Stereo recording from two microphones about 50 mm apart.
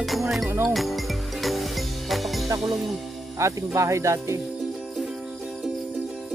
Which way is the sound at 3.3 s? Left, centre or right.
Right.